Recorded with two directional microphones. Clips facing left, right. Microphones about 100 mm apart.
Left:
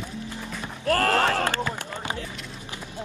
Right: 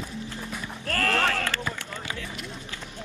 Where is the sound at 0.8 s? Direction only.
30° left (ahead or behind).